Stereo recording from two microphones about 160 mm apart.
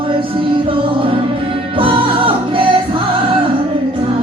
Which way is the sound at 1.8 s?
35° right (ahead or behind).